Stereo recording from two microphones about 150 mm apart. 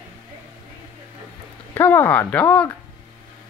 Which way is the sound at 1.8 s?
10° left (ahead or behind).